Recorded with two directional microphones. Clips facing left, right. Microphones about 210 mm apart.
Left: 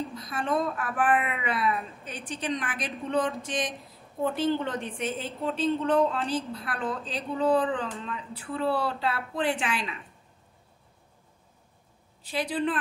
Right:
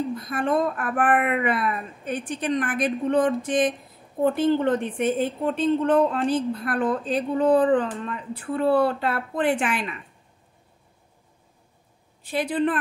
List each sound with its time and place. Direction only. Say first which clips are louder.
0.1 s a woman's voice: right 5 dB; 55° right (ahead or behind)
12.2 s a woman's voice: right 5 dB; 55° right (ahead or behind)